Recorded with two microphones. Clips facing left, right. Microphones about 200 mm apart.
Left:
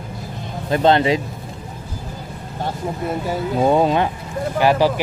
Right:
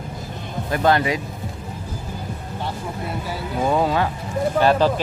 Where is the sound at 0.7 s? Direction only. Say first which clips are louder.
Left 4 dB; 25° left (ahead or behind).